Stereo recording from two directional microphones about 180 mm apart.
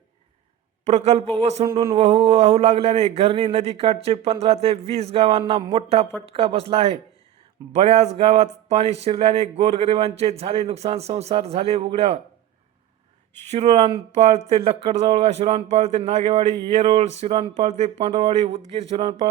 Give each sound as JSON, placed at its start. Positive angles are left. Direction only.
{"t": 0.9, "sound": "speech", "side_deg": -35}
{"t": 13.5, "sound": "speech", "side_deg": -35}